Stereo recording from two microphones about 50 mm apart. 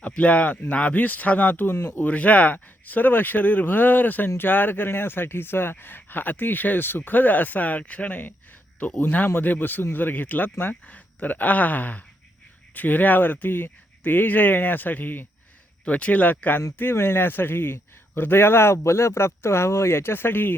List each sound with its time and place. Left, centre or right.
0.2 s speech: left
1.7 s a man's voice: left
2.0 s a man's voice: left
10.8 s speech: left
15.8 s speech: left
16.9 s a man's voice: left